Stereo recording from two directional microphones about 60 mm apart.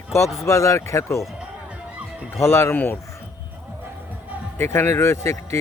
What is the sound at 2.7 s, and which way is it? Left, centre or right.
Speech, left.